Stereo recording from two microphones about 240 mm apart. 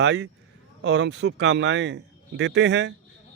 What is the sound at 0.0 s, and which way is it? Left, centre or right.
A man's voice, right.